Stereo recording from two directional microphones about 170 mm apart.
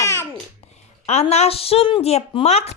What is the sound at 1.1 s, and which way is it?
A woman's voice, 40° left (ahead or behind).